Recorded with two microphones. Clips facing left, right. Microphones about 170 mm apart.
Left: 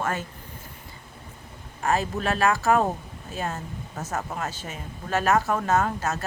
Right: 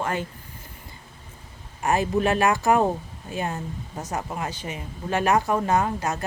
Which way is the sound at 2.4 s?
15° right (ahead or behind).